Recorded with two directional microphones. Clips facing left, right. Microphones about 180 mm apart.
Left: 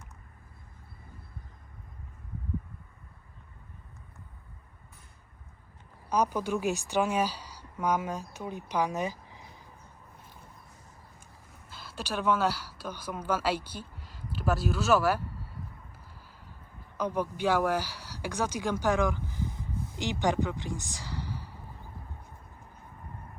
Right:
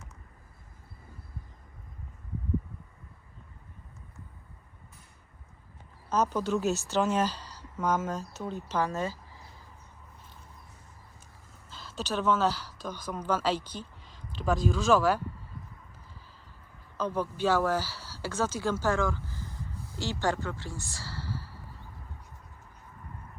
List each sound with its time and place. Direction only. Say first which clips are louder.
6.1 s a woman's voice: even; 10° left (ahead or behind)
11.7 s speech: right 2 dB; 10° left (ahead or behind)
17.0 s speech: even; 15° left (ahead or behind)